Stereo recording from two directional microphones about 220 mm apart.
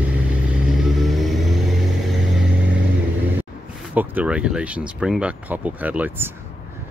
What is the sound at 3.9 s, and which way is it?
Speech, 5° right (ahead or behind).